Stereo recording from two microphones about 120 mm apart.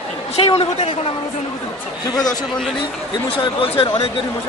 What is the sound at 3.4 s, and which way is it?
Speech, 50° left (ahead or behind).